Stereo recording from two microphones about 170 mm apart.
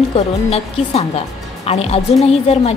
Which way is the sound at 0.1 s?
35° left (ahead or behind).